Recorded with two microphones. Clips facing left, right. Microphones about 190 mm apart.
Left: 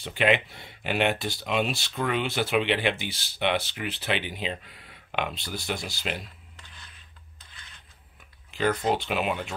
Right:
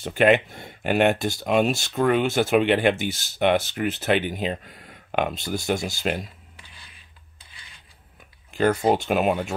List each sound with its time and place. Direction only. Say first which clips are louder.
0.0 s speech: right 6 dB; 45° right (ahead or behind)
8.5 s speech: right 5 dB; 50° right (ahead or behind)